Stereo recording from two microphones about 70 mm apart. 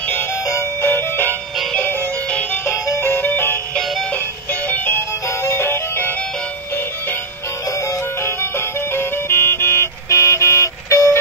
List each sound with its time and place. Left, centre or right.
0.5 s music: left
8.2 s music: left